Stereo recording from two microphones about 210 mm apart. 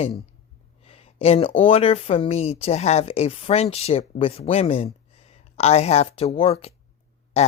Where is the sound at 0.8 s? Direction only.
30° left (ahead or behind).